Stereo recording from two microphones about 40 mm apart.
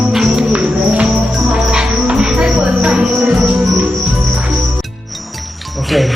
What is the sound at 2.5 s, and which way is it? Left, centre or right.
Speech, right.